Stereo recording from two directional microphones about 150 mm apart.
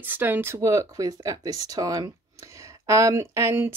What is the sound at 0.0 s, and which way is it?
Speech, 15° right (ahead or behind).